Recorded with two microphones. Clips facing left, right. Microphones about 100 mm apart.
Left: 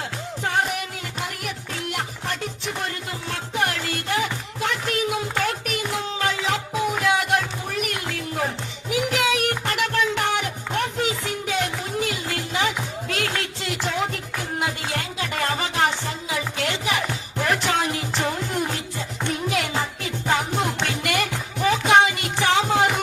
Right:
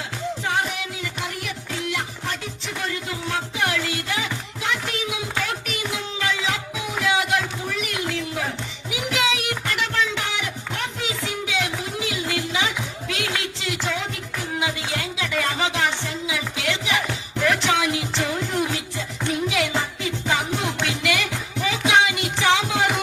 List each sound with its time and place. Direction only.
0.4 s music: 50° left (ahead or behind)
7.0 s a sound: 45° left (ahead or behind)
8.9 s music: 45° left (ahead or behind)